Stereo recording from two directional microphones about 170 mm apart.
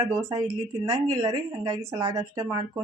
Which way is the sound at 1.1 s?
20° right (ahead or behind).